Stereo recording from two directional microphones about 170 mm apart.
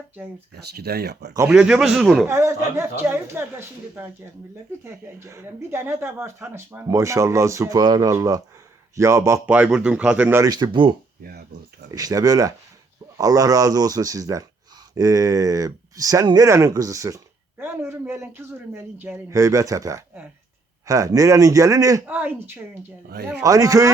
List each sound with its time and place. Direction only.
0.8 s speech: 70° right (ahead or behind)
1.5 s a man's voice: 5° right (ahead or behind)
2.2 s speech: 15° right (ahead or behind); by 10.9 s 30° right (ahead or behind)
11.2 s speech: 70° right (ahead or behind)
11.9 s speech: 20° right (ahead or behind)
23.0 s speech: 70° right (ahead or behind)
23.4 s speech: 20° right (ahead or behind)